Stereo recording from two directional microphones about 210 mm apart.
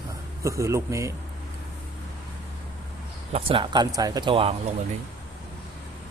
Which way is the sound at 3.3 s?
25° right (ahead or behind).